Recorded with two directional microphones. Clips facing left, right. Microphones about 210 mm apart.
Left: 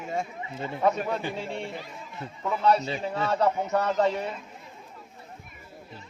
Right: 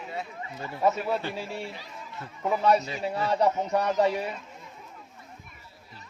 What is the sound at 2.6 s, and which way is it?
A man's voice, 10° right (ahead or behind).